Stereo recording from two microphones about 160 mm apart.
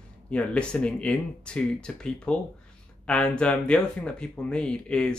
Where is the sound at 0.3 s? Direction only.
5° left (ahead or behind).